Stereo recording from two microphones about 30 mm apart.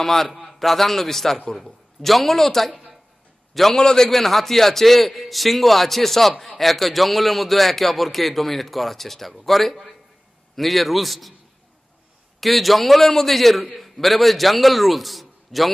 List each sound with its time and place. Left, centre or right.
0.0 s a man's voice: centre
3.7 s a man's voice: centre
4.1 s a man's voice: centre
12.4 s a man's voice: centre